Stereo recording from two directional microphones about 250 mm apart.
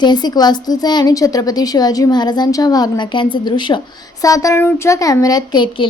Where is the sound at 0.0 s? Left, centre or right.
Centre.